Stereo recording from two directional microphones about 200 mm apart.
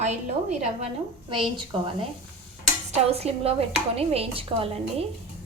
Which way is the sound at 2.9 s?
30° right (ahead or behind).